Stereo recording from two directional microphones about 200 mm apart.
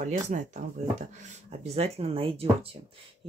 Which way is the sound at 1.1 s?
35° right (ahead or behind).